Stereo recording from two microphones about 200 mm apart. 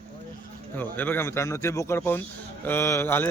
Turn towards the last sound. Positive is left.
turn(degrees=10)  # may be behind; listen again after turning